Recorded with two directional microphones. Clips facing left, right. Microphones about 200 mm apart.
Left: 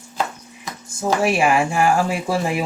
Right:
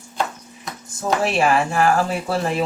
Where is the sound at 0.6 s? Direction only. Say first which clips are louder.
Left 2 dB; 10° left (ahead or behind).